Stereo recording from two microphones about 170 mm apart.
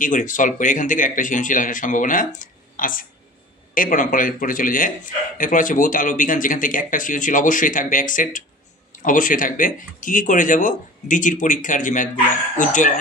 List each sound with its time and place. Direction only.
0.0 s a man's voice: 50° left (ahead or behind)